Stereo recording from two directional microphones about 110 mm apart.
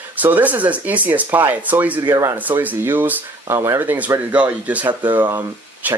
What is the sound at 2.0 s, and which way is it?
Speech, 30° right (ahead or behind).